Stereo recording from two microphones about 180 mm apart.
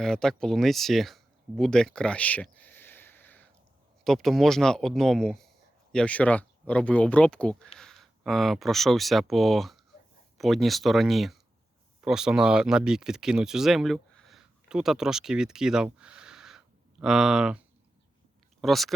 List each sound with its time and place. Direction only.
0.0 s speech: 5° left (ahead or behind)
18.6 s speech: centre (ahead or behind)